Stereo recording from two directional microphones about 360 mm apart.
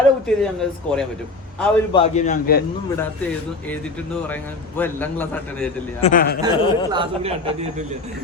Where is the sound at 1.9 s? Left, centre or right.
Centre.